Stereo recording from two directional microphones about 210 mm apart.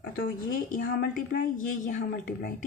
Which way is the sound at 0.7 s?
40° left (ahead or behind).